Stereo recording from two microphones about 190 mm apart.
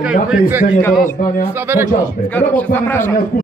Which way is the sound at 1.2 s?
45° left (ahead or behind).